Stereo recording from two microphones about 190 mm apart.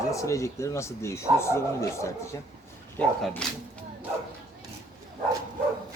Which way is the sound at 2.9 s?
5° left (ahead or behind).